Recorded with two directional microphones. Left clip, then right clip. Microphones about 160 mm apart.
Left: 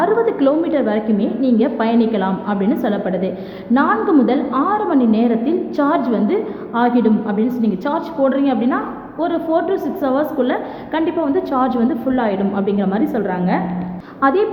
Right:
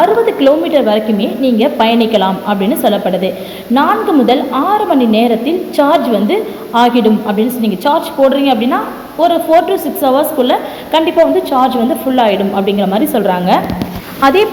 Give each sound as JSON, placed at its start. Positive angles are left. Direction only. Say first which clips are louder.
{"t": 0.0, "sound": "a woman's voice", "louder": "right 6 dB", "side_deg": -5}
{"t": 13.2, "sound": "speech", "louder": "right 9 dB", "side_deg": -20}